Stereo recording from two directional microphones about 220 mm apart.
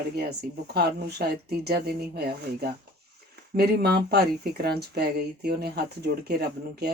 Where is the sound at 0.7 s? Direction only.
45° right (ahead or behind).